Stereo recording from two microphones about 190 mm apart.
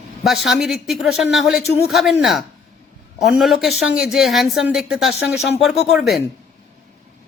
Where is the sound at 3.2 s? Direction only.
Centre (ahead or behind).